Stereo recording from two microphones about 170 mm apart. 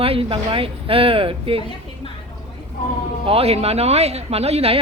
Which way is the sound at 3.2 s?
35° right (ahead or behind).